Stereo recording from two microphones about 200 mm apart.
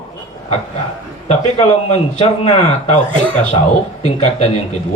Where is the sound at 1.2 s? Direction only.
35° left (ahead or behind).